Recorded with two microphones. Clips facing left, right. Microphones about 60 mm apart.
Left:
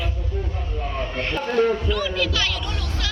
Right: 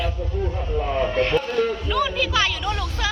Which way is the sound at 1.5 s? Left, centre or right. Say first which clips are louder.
Left 3 dB; left.